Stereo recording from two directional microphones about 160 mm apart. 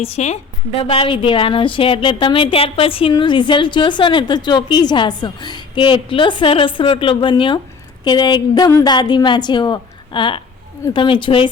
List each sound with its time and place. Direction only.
0.0 s a woman's voice: 40° left (ahead or behind)